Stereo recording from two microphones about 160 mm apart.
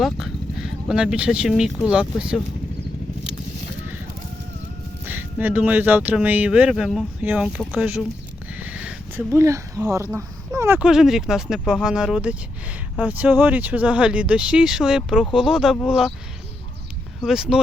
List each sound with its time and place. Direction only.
0.0 s speech: centre (ahead or behind)
5.0 s speech: 10° right (ahead or behind)
8.5 s a sound: 10° right (ahead or behind)
9.3 s speech: 20° right (ahead or behind)
10.8 s speech: 5° right (ahead or behind)
17.2 s speech: 5° right (ahead or behind)